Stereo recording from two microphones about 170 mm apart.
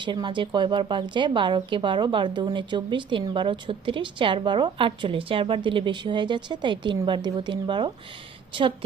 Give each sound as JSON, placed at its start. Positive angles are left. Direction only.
{"t": 0.0, "sound": "speech", "side_deg": -25}